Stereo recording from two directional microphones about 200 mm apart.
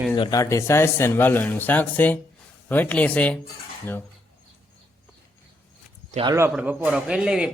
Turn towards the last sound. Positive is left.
turn(degrees=-5)  # may be behind; listen again after turning